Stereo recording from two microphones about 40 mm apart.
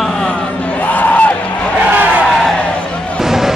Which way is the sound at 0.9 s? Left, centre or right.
Left.